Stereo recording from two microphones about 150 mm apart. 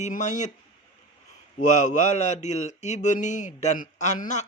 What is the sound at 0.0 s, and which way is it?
Mantra, 55° left (ahead or behind).